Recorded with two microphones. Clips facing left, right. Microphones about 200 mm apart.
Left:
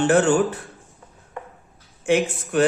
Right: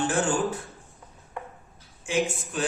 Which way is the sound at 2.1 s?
65° left (ahead or behind).